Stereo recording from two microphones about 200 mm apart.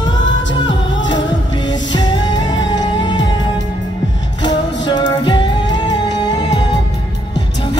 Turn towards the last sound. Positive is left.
turn(degrees=20)  # may be behind; listen again after turning